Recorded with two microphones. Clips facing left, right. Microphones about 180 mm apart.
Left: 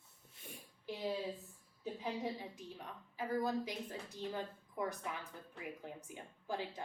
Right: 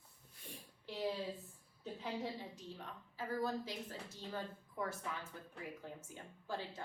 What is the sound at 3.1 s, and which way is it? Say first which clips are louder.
A woman's voice: left 3 dB; 15° left (ahead or behind).